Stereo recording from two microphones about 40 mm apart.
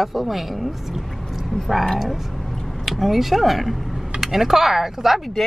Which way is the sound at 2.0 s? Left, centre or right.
Centre.